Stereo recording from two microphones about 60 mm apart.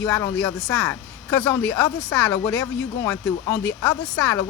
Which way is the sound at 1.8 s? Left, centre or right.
Left.